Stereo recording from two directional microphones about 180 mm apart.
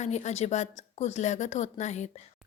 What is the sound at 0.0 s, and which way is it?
A woman's voice, 40° left (ahead or behind).